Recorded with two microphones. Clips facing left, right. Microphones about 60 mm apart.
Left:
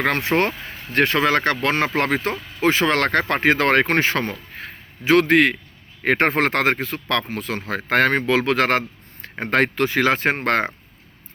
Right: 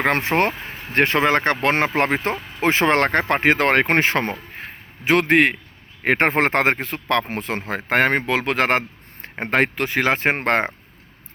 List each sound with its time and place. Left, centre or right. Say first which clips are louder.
0.1 s speech: right 1 dB; right
2.3 s speech: even; right